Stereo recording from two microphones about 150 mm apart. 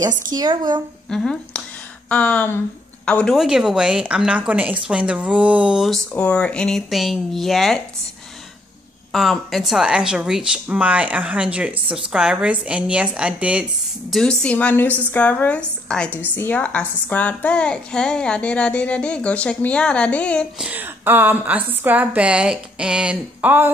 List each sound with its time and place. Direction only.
0.3 s speech: 25° right (ahead or behind)
1.1 s a woman's voice: 5° left (ahead or behind)
3.3 s a woman's voice: 5° right (ahead or behind)
6.1 s speech: 10° left (ahead or behind)
9.1 s a woman's voice: centre (ahead or behind)
14.1 s a woman's voice: 5° left (ahead or behind)
20.5 s a woman's voice: 10° right (ahead or behind)